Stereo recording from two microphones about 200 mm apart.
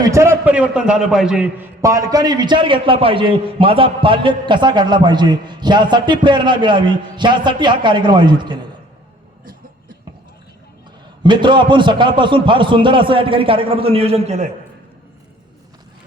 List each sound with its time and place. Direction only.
0.0 s a man's voice: 15° right (ahead or behind)
11.2 s a man's voice: 25° right (ahead or behind)